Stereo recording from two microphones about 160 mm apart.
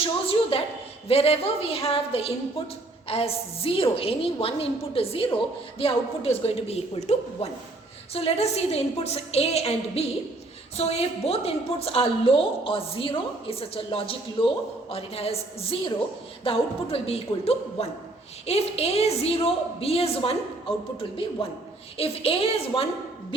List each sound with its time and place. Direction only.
0.0 s a woman's voice: 35° left (ahead or behind)
21.9 s a woman's voice: 40° left (ahead or behind)